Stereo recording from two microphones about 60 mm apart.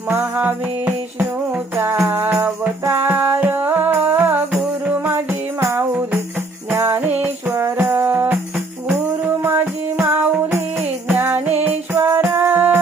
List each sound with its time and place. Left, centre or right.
0.3 s music: right
1.7 s music: right
2.0 s music: right
6.7 s music: right
7.0 s music: right
7.5 s music: right